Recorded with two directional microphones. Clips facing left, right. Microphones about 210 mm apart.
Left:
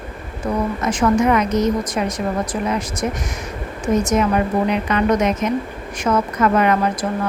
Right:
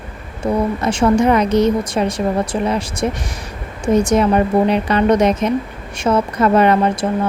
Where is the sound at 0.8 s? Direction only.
30° right (ahead or behind).